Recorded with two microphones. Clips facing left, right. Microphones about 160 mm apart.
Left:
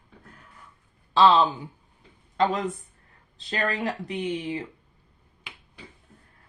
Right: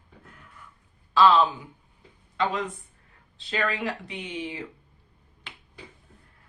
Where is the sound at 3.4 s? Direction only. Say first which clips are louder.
Left 1 dB; 40° left (ahead or behind).